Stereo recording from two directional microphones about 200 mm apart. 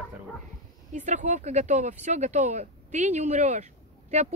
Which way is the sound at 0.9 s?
35° right (ahead or behind).